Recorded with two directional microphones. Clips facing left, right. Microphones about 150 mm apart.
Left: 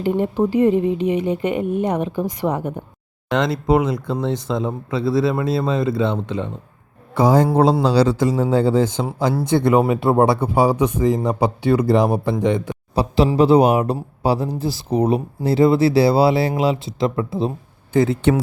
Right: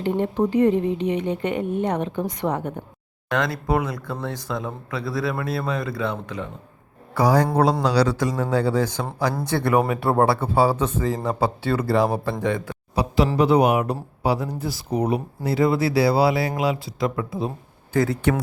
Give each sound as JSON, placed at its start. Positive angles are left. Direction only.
{"t": 0.0, "sound": "speech", "side_deg": 10}
{"t": 3.2, "sound": "speech", "side_deg": 20}